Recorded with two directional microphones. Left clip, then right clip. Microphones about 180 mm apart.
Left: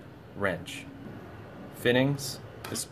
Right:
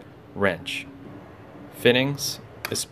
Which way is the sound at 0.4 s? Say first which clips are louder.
Right 7 dB; 45° right (ahead or behind).